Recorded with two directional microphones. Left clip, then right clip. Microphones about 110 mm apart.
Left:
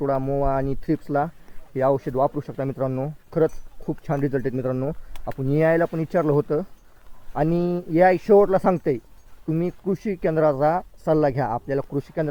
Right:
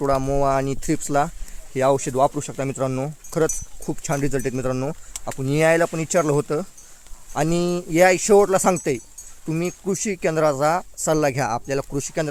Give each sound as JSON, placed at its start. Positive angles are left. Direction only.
{"t": 0.0, "sound": "speech", "side_deg": -30}